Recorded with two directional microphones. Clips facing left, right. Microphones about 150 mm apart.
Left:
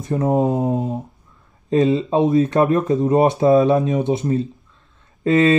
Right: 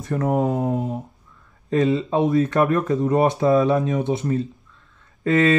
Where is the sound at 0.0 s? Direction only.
20° left (ahead or behind).